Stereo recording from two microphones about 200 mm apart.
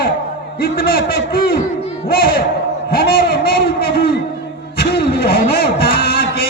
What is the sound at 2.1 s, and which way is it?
Battle cry, 50° left (ahead or behind).